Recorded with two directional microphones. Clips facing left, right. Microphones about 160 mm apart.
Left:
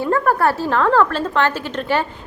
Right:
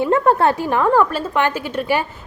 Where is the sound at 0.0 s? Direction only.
20° right (ahead or behind).